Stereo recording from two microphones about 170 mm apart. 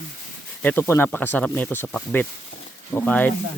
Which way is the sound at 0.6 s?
10° left (ahead or behind).